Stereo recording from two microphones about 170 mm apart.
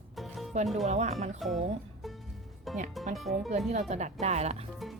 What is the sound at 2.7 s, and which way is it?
Music, centre (ahead or behind).